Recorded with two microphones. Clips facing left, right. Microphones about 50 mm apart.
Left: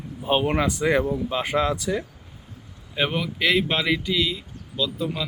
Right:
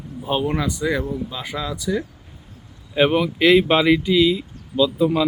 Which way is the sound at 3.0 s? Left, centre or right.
Right.